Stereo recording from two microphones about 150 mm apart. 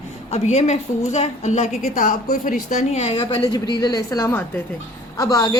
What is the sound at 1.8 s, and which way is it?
A woman's voice, 60° left (ahead or behind).